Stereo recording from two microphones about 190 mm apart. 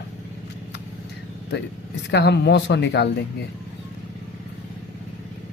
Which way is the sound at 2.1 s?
65° left (ahead or behind).